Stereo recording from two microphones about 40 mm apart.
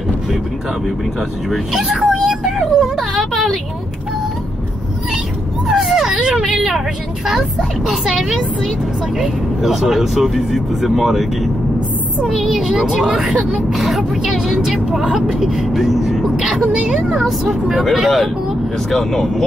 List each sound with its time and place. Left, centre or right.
1.8 s speech: centre
2.2 s a sound: centre
3.0 s a sound: centre
5.7 s dog: centre
6.0 s vehicle: centre
7.2 s speech: centre
9.2 s speech: centre
12.3 s speech: centre
13.5 s speech: centre
14.2 s speech: centre
16.3 s a sound: centre
16.7 s speech: right
17.1 s speech: centre